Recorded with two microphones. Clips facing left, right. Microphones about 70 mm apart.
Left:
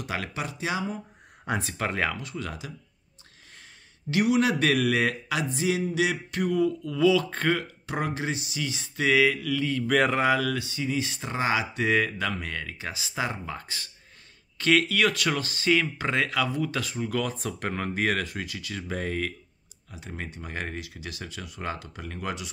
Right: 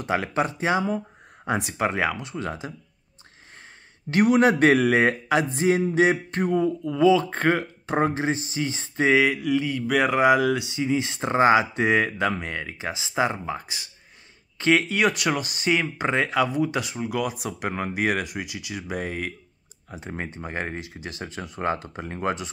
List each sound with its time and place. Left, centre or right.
0.0 s speech: right
1.4 s speech: centre
4.1 s speech: right; by 10.2 s centre
10.2 s speech: centre
19.9 s speech: right